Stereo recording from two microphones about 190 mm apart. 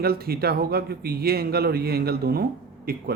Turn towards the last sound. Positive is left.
turn(degrees=-50)  # may be behind; listen again after turning